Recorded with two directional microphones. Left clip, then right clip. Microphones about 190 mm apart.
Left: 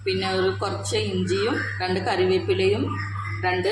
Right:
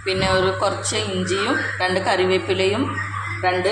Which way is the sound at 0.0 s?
10° right (ahead or behind).